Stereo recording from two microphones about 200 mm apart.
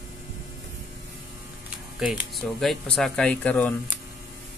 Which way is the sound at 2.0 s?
5° right (ahead or behind).